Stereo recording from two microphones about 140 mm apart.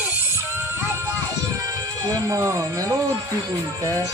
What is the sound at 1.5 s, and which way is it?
Speech, 25° right (ahead or behind).